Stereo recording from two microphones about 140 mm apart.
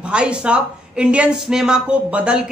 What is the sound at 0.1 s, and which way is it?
A woman's voice, 5° right (ahead or behind).